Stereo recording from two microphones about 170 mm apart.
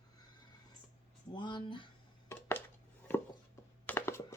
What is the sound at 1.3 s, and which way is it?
Speech, 25° left (ahead or behind).